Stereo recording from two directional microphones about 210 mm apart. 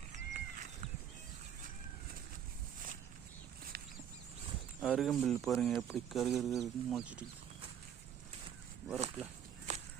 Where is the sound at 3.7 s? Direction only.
45° right (ahead or behind).